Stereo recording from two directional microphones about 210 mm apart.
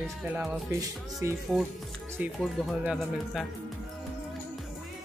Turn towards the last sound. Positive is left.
turn(degrees=-5)  # may be behind; listen again after turning